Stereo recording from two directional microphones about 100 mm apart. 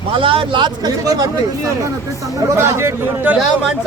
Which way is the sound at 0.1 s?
60° right (ahead or behind).